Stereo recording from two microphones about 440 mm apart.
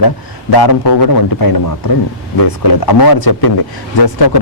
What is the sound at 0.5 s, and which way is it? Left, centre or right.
A man's voice, left.